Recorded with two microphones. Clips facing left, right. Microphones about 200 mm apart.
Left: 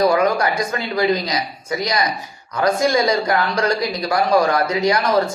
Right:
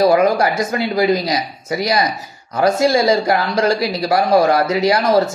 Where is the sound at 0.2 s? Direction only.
30° right (ahead or behind).